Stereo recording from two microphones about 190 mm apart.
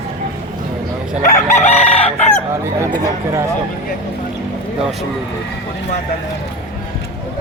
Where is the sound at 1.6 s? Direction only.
35° left (ahead or behind).